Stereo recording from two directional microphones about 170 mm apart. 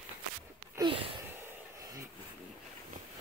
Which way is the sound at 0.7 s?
30° right (ahead or behind).